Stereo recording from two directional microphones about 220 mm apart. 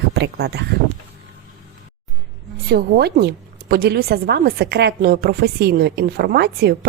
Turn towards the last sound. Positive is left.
turn(degrees=-45)  # may be behind; listen again after turning